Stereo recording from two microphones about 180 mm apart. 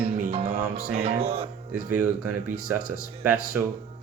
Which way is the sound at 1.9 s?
10° right (ahead or behind).